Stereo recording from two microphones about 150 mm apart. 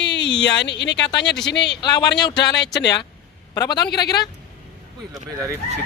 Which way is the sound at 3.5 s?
25° left (ahead or behind).